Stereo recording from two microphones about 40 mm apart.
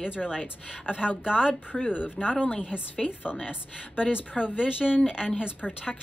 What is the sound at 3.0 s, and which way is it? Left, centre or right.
A woman's voice, left.